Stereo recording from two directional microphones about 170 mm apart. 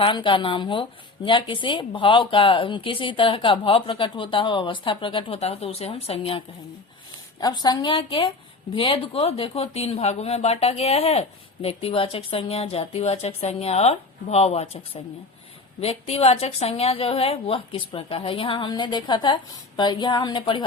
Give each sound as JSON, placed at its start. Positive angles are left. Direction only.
{"t": 0.0, "sound": "speech", "side_deg": 30}
{"t": 7.3, "sound": "speech", "side_deg": 25}